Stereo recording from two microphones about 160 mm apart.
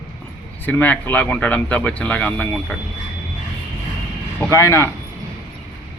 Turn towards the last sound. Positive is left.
turn(degrees=15)  # may be behind; listen again after turning